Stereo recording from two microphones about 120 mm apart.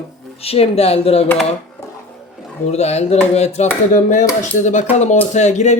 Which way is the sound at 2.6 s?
65° left (ahead or behind).